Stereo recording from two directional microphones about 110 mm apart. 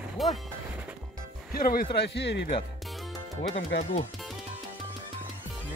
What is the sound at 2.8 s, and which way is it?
Music, centre (ahead or behind).